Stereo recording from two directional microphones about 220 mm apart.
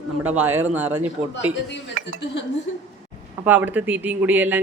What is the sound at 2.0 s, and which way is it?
Speech, 50° right (ahead or behind).